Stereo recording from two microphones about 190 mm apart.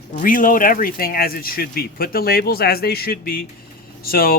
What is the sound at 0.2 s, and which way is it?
Speech, 45° left (ahead or behind).